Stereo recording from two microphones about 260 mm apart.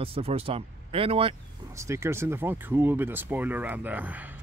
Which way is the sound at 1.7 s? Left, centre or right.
Centre.